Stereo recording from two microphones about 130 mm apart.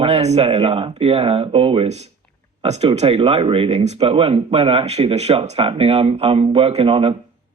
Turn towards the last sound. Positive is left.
turn(degrees=-45)  # may be behind; listen again after turning